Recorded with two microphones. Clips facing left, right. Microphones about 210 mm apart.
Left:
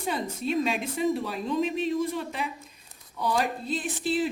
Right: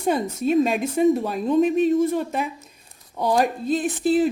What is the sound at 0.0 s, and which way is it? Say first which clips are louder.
A woman's voice: right 8 dB; 45° right (ahead or behind).